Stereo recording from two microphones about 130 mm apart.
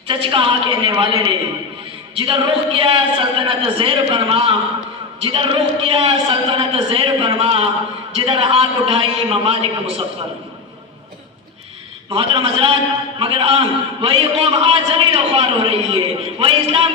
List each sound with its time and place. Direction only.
0.1 s a woman's voice: 40° right (ahead or behind)
12.1 s a man's voice: 45° right (ahead or behind)